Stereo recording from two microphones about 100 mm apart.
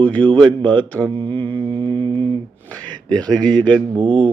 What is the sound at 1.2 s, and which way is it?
Mantra, 55° right (ahead or behind).